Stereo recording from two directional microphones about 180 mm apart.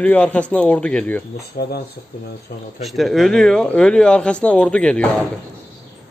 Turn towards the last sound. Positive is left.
turn(degrees=5)  # may be behind; listen again after turning